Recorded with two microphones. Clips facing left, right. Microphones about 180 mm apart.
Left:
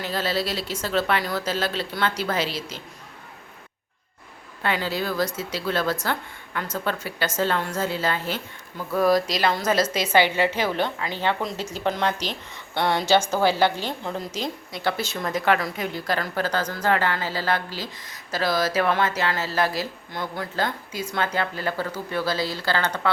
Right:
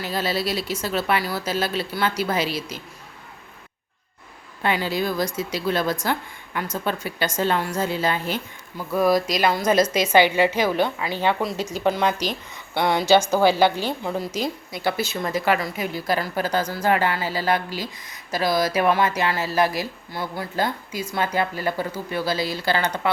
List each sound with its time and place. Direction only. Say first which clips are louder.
0.0 s a woman's voice: right 1 dB; 10° right (ahead or behind)
4.6 s a woman's voice: right 3 dB; 15° right (ahead or behind)